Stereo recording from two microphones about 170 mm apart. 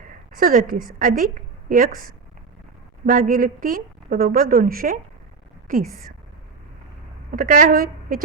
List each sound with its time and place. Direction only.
0.3 s a woman's voice: 55° right (ahead or behind)
7.3 s a woman's voice: 55° right (ahead or behind)